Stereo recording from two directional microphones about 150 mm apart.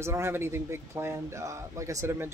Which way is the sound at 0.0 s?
15° right (ahead or behind).